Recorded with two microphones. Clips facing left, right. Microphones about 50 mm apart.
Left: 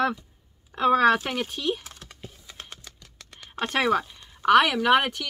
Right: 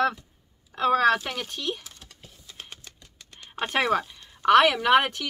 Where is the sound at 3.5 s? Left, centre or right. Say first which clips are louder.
Left 1 dB; centre.